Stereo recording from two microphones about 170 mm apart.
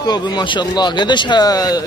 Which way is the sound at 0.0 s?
25° left (ahead or behind).